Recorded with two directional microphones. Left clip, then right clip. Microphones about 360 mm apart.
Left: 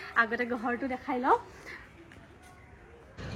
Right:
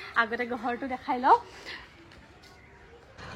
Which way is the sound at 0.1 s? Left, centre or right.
Centre.